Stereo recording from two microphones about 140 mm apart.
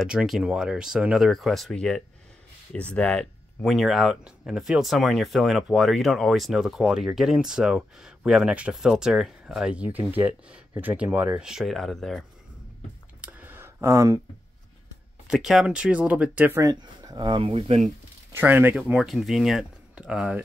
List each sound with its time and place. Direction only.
0.0 s speech: 5° right (ahead or behind)
13.2 s a sound: 15° right (ahead or behind)
15.2 s speech: 5° right (ahead or behind)
16.6 s speech: 30° right (ahead or behind)
17.4 s speech: 45° right (ahead or behind)
18.3 s speech: 15° right (ahead or behind)